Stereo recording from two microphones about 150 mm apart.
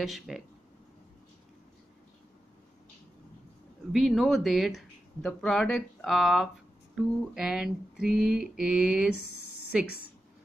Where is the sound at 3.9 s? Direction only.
Centre (ahead or behind).